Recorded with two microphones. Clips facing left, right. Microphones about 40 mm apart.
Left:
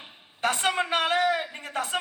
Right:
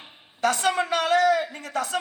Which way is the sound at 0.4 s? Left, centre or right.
Left.